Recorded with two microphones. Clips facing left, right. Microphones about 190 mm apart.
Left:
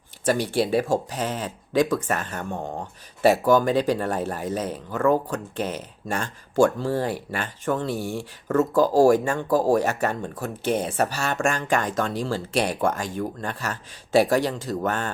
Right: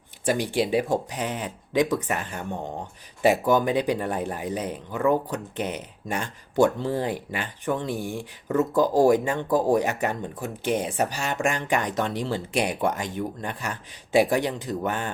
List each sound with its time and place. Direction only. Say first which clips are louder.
0.3 s speech: left 1 dB; 15° right (ahead or behind)